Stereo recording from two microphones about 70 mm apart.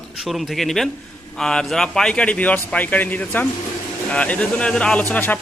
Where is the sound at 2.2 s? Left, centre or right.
Centre.